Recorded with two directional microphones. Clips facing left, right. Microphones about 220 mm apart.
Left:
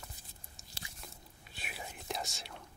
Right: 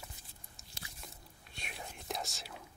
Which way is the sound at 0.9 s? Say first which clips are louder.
Even; centre (ahead or behind).